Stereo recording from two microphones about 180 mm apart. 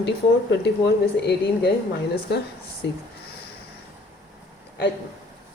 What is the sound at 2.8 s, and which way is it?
Speech, 75° left (ahead or behind).